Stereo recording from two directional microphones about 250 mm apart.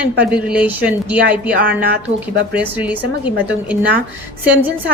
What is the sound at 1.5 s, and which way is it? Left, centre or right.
Speech, right.